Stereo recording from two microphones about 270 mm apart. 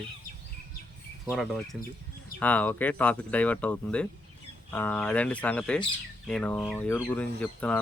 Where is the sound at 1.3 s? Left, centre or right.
Centre.